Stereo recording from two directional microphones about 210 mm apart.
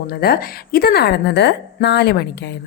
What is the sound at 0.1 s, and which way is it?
A woman's voice, 45° left (ahead or behind).